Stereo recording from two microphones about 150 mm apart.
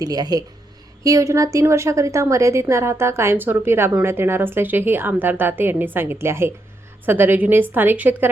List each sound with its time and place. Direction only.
0.0 s a woman's voice: 25° right (ahead or behind)